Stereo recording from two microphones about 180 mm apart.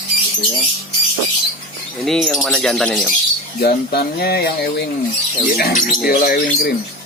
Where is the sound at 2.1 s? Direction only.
Centre (ahead or behind).